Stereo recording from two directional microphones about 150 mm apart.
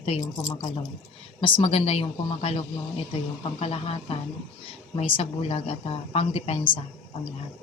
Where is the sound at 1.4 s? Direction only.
35° left (ahead or behind).